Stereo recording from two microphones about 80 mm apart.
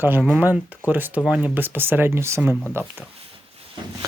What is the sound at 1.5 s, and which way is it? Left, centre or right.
Speech, right.